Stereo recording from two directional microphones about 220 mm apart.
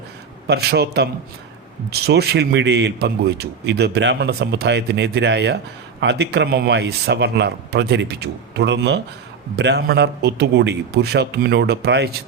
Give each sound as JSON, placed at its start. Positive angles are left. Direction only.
{"t": 0.4, "sound": "a man's voice", "side_deg": -45}